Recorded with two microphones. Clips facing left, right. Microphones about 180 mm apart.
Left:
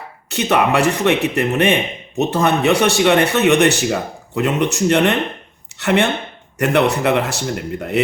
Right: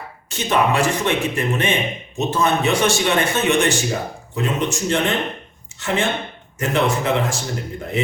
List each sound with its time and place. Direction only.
0.3 s a man's voice: 65° left (ahead or behind)